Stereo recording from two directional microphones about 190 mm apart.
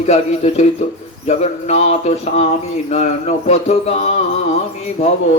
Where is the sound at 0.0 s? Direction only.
35° left (ahead or behind).